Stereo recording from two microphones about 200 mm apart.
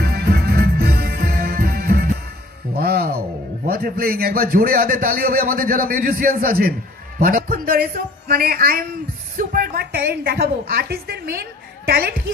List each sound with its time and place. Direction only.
0.0 s music: 50° right (ahead or behind)
3.6 s a man's voice: 45° right (ahead or behind)